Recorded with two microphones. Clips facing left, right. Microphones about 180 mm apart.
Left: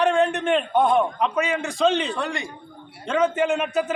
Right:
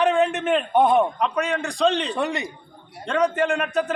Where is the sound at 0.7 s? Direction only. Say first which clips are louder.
Right 3 dB; 20° right (ahead or behind).